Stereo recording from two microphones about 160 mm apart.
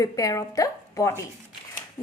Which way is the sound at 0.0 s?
20° left (ahead or behind).